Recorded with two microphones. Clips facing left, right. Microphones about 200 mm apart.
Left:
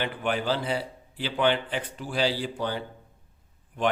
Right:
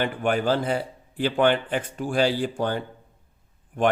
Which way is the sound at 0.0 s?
45° right (ahead or behind).